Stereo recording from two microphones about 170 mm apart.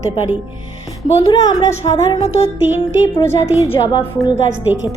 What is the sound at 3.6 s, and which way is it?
Speech, 20° left (ahead or behind).